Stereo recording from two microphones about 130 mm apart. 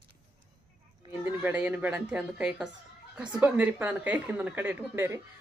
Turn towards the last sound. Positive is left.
turn(degrees=-15)  # may be behind; listen again after turning